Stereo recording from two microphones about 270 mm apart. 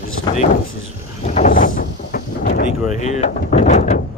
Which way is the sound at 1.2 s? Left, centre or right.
Left.